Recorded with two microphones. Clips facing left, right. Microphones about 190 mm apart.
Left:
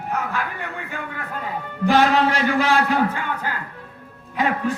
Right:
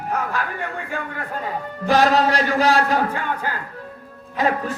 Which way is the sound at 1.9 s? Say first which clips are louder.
Right 1 dB; 40° right (ahead or behind).